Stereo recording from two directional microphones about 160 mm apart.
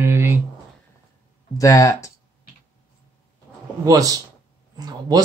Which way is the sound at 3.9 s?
20° right (ahead or behind).